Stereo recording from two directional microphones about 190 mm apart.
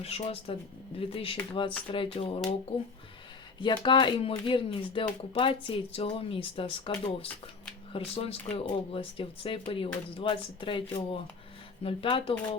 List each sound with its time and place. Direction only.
0.0 s speech: 30° left (ahead or behind)
3.6 s speech: 25° left (ahead or behind)